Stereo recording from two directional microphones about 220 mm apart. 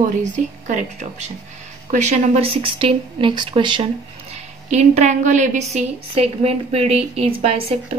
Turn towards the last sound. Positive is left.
turn(degrees=-25)  # may be behind; listen again after turning